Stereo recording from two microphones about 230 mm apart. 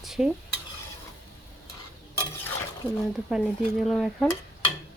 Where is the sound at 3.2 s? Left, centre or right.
Centre.